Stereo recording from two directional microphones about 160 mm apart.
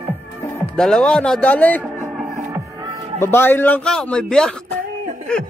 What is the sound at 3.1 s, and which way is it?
A man's voice, 15° left (ahead or behind).